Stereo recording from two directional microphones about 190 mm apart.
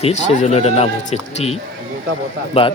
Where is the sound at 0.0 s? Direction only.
40° left (ahead or behind).